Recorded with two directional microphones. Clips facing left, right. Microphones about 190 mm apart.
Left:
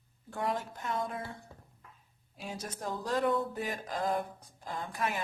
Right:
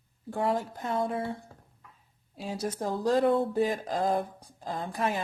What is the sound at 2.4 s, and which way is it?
Mantra, 30° right (ahead or behind).